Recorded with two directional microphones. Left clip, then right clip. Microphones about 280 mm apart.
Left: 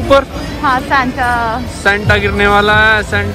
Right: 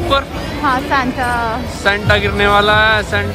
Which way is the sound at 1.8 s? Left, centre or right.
Centre.